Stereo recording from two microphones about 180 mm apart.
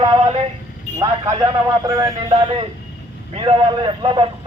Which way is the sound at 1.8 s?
20° right (ahead or behind).